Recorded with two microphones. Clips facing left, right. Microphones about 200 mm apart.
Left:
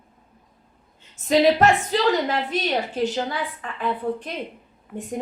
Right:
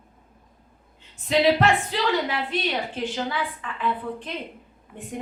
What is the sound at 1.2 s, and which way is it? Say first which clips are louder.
A woman's voice: left 3 dB; 45° left (ahead or behind).